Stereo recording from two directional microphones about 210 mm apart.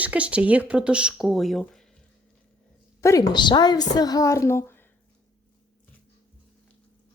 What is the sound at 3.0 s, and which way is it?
A woman's voice, 15° left (ahead or behind).